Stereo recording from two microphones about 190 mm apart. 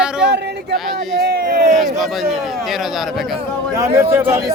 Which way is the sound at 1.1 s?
50° right (ahead or behind).